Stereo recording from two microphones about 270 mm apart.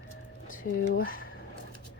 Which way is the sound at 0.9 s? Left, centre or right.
Left.